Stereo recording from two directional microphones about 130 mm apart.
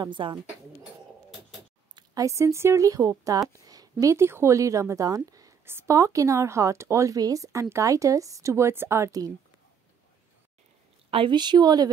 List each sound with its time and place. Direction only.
0.0 s speech: 35° right (ahead or behind)
2.0 s a woman's voice: 25° right (ahead or behind)
11.1 s speech: 40° right (ahead or behind)